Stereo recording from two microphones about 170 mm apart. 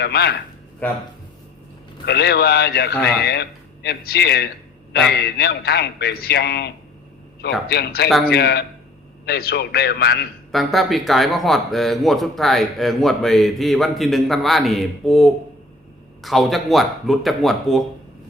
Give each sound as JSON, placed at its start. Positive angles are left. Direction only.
{"t": 0.0, "sound": "a man's voice", "side_deg": 75}
{"t": 2.0, "sound": "a man's voice", "side_deg": 75}
{"t": 7.7, "sound": "a man's voice", "side_deg": 75}
{"t": 10.5, "sound": "speech", "side_deg": 0}